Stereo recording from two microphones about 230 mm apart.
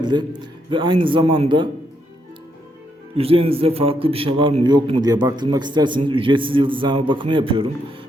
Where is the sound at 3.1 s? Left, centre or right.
Right.